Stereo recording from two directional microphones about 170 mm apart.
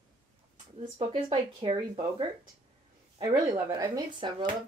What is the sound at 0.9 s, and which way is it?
Speech, 30° right (ahead or behind).